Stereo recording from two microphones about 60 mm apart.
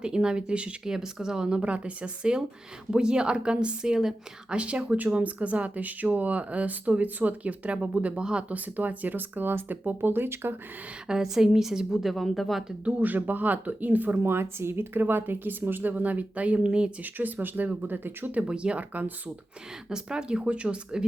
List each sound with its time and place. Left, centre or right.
0.0 s a woman's voice: centre; by 10.5 s right
11.1 s speech: centre
12.1 s speech: centre
12.8 s a woman's voice: right
17.0 s speech: right
18.3 s a woman's voice: centre
19.9 s speech: centre